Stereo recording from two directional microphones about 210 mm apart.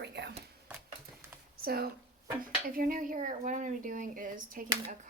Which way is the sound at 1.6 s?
45° right (ahead or behind).